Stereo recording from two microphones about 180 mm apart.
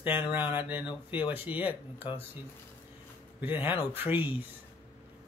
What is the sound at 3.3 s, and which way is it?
Speech, 10° right (ahead or behind).